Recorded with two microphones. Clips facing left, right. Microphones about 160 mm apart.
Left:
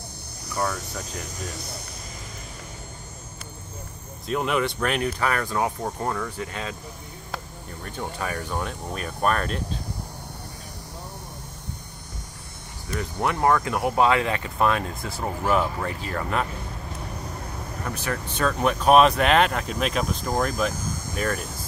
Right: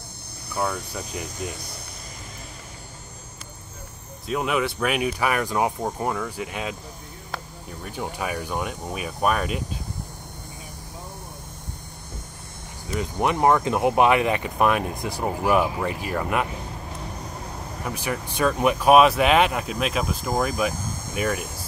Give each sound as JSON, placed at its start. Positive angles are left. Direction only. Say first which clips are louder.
{"t": 0.6, "sound": "speech", "louder": "right 1 dB", "side_deg": -5}
{"t": 4.3, "sound": "speech", "louder": "even", "side_deg": -5}
{"t": 7.8, "sound": "speech", "louder": "right 1 dB", "side_deg": -10}
{"t": 12.9, "sound": "speech", "louder": "right 3 dB", "side_deg": -20}
{"t": 17.8, "sound": "speech", "louder": "right 1 dB", "side_deg": -10}